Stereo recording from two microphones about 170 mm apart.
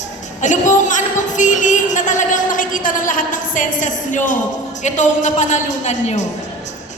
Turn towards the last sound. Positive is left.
turn(degrees=45)  # may be behind; listen again after turning